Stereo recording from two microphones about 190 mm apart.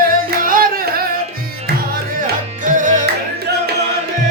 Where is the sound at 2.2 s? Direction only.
45° right (ahead or behind).